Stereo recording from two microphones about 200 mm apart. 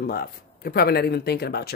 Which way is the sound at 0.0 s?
50° left (ahead or behind).